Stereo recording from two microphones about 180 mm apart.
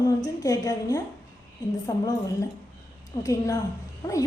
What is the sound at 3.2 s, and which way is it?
Speech, 15° left (ahead or behind).